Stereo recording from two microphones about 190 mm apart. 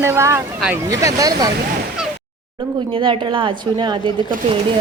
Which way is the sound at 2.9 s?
25° right (ahead or behind).